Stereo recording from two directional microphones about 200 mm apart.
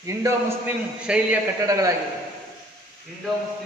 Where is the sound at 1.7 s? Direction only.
15° right (ahead or behind).